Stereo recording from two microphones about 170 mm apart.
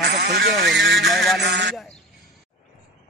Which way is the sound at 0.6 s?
Centre (ahead or behind).